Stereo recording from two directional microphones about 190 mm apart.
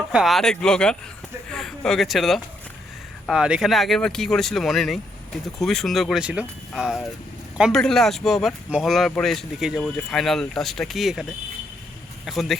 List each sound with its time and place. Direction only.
0.1 s speech: centre (ahead or behind)
1.5 s a sound: 5° left (ahead or behind)
3.2 s speech: 5° right (ahead or behind)